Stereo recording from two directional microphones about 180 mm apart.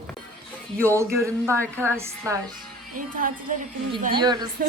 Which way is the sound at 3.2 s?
50° right (ahead or behind).